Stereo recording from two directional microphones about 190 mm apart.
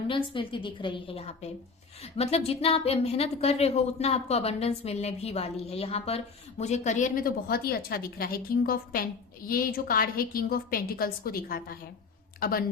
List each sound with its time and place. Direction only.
0.3 s a woman's voice: 25° left (ahead or behind); by 12.6 s 50° left (ahead or behind)